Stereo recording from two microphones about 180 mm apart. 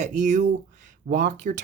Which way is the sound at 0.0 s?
40° right (ahead or behind).